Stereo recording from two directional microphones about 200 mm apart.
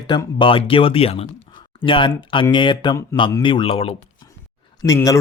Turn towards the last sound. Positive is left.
turn(degrees=15)  # may be behind; listen again after turning